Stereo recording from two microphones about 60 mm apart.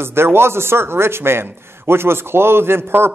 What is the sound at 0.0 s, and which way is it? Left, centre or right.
A man's voice, right.